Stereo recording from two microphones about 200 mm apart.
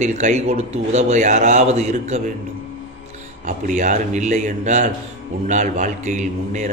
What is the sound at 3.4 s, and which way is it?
Mantra, 40° right (ahead or behind).